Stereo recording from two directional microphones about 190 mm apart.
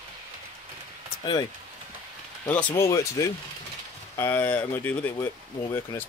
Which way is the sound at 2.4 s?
10° left (ahead or behind).